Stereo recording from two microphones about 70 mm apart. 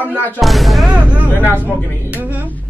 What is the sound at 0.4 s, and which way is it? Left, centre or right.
Speech, centre.